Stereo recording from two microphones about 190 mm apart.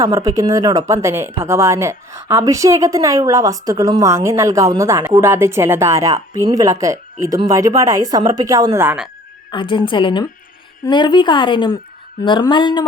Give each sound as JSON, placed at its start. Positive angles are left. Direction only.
{"t": 0.0, "sound": "a woman's voice", "side_deg": -15}
{"t": 9.5, "sound": "speech", "side_deg": 25}